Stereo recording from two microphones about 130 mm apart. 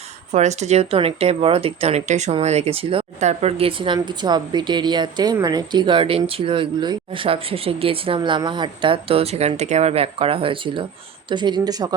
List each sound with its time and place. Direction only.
0.3 s speech: 60° right (ahead or behind)
3.2 s a woman's voice: 60° right (ahead or behind); by 11.9 s 30° right (ahead or behind)